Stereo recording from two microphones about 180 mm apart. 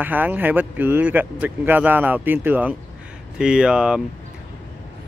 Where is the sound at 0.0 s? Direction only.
10° right (ahead or behind).